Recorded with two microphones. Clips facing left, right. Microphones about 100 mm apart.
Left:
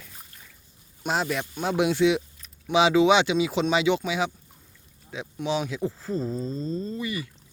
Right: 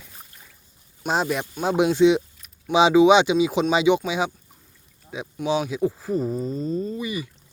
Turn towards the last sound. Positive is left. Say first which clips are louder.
# right 3 dB
turn(degrees=-15)  # may be behind; listen again after turning